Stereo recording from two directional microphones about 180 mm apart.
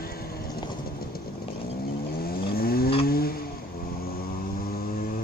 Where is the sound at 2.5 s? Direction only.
55° left (ahead or behind).